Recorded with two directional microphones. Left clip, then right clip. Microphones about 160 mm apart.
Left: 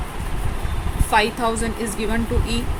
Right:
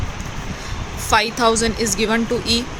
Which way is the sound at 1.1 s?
35° right (ahead or behind).